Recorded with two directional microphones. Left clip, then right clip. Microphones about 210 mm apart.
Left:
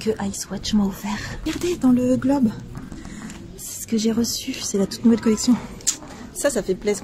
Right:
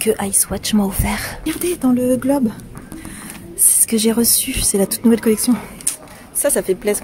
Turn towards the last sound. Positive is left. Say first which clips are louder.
# right 4 dB
turn(degrees=-10)  # may be behind; listen again after turning